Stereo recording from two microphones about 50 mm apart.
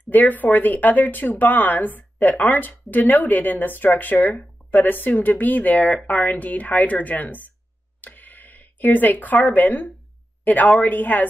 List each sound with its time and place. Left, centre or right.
0.1 s speech: left
8.0 s a sound: left
10.4 s a woman's voice: left